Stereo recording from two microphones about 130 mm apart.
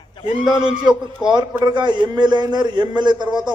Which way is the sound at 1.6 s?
35° right (ahead or behind).